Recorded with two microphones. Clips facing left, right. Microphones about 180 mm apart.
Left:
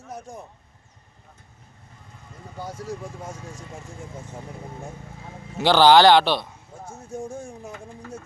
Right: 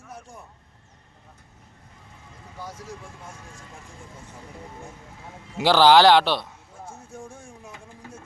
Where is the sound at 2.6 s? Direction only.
30° left (ahead or behind).